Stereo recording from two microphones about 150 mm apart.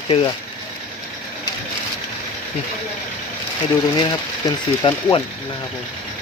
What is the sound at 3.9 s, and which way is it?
Speech, 30° left (ahead or behind).